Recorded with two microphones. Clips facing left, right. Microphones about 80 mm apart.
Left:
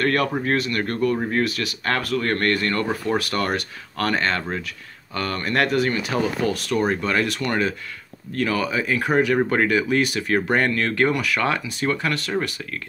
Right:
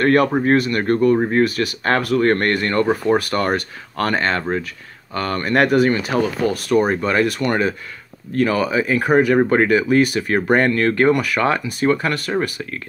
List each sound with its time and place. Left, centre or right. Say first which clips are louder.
0.0 s speech: right 6 dB; centre
0.3 s speech: right 7 dB; right
0.6 s speech: right 5 dB; centre
0.8 s speech: right 7 dB; centre
5.1 s speech: right 5 dB; centre